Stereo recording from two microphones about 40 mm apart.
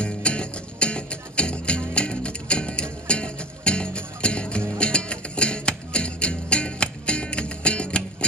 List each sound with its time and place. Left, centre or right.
0.0 s music: left